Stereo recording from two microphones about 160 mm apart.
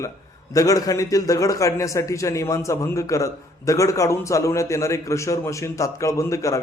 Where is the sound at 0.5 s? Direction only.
20° left (ahead or behind).